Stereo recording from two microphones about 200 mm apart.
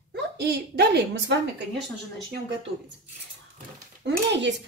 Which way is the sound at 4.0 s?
60° right (ahead or behind).